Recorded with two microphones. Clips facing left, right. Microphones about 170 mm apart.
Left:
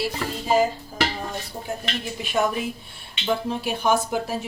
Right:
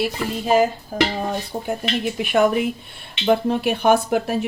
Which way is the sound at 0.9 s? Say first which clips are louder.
Right 6 dB; 65° right (ahead or behind).